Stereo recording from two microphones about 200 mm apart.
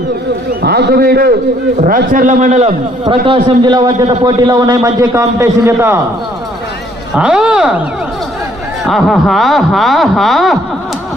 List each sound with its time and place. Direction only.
0.6 s a man's voice: 55° right (ahead or behind); by 2.7 s 35° right (ahead or behind)
3.2 s a man's voice: 20° right (ahead or behind)
7.2 s speech: 5° right (ahead or behind)
8.9 s speech: centre (ahead or behind)